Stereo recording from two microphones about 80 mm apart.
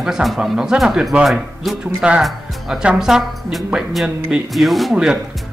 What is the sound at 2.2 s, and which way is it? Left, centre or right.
A man's voice, centre.